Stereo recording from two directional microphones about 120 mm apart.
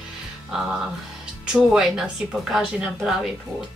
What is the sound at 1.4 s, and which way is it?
A woman's voice, 5° right (ahead or behind).